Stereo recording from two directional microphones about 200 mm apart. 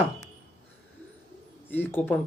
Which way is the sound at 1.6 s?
10° left (ahead or behind).